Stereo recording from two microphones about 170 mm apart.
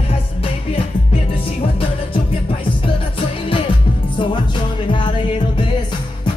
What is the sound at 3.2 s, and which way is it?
Music, 30° left (ahead or behind).